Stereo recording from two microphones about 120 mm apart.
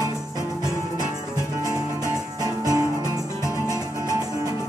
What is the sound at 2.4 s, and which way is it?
Music, 30° right (ahead or behind).